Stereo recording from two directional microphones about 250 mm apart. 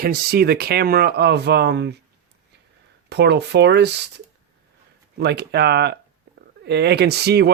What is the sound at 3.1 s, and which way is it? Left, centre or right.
Speech, right.